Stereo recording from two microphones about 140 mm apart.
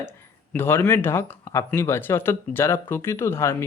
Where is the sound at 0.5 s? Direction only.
15° left (ahead or behind).